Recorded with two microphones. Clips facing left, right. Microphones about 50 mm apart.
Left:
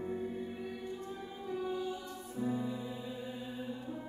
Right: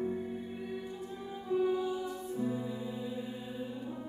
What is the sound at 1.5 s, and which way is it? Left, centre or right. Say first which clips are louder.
Music: right 7 dB; centre.